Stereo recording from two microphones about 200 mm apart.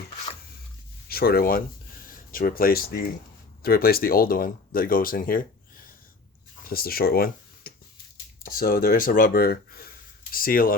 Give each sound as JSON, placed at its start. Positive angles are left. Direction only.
{"t": 1.0, "sound": "speech", "side_deg": 50}